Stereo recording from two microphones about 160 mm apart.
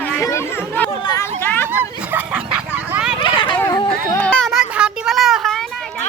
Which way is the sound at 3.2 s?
30° left (ahead or behind).